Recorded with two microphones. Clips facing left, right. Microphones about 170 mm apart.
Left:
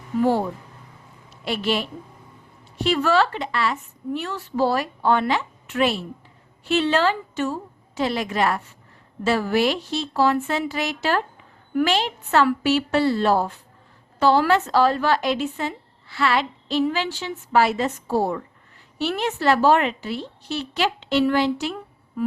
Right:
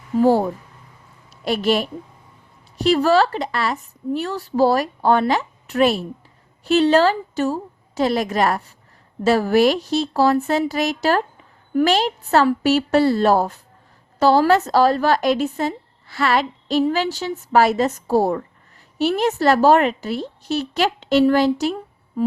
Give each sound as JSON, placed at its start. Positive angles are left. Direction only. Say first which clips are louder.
{"t": 0.2, "sound": "a woman's voice", "louder": "right 5 dB", "side_deg": -40}